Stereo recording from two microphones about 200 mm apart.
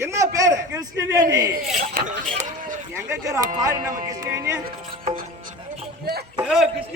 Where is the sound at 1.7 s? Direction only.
40° right (ahead or behind).